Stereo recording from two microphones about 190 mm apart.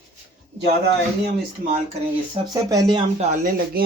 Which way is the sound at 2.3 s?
25° right (ahead or behind).